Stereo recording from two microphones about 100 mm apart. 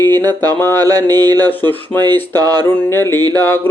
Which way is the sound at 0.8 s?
40° right (ahead or behind).